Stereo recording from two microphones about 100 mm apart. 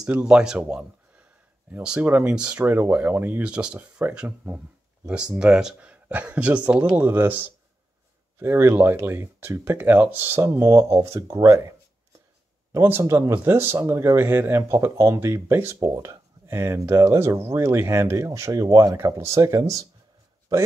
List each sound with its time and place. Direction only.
0.0 s speech: 10° right (ahead or behind); by 11.6 s 30° right (ahead or behind)
12.7 s speech: 25° right (ahead or behind)